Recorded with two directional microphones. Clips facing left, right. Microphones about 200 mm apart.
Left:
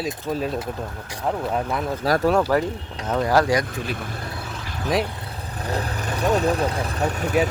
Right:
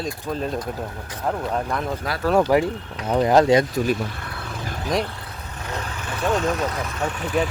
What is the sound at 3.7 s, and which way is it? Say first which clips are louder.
Speech: right 7 dB; 45° right (ahead or behind).